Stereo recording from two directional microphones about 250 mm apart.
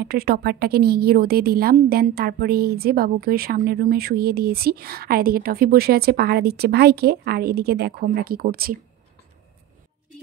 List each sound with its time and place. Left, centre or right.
0.0 s a woman's voice: right